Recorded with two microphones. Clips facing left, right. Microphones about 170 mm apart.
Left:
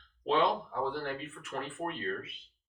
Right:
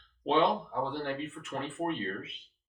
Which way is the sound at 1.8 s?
25° right (ahead or behind).